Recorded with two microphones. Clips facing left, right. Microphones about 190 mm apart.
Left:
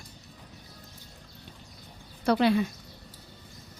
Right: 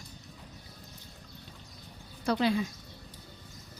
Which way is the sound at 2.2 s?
65° left (ahead or behind).